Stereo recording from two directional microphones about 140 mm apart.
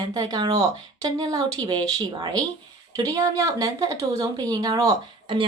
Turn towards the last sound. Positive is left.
turn(degrees=-30)  # may be behind; listen again after turning